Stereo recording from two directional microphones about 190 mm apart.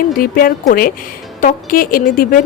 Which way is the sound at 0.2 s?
50° left (ahead or behind).